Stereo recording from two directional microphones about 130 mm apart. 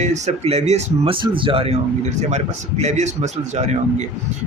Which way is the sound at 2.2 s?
60° right (ahead or behind).